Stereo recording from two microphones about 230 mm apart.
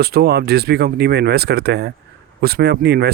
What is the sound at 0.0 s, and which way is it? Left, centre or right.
Speech, right.